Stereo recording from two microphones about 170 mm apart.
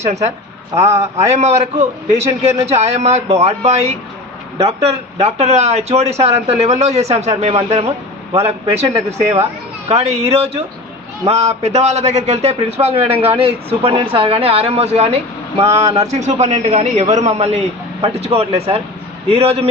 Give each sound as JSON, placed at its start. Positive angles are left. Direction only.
{"t": 0.0, "sound": "a man's voice", "side_deg": -40}